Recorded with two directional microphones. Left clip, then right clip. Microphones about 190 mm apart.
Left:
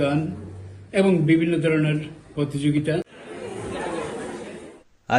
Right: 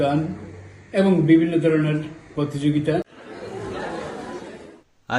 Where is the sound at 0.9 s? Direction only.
15° right (ahead or behind).